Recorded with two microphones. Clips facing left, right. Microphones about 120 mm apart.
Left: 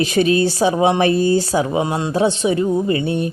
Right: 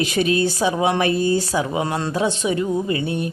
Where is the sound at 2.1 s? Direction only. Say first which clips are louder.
Left 6 dB; 30° left (ahead or behind).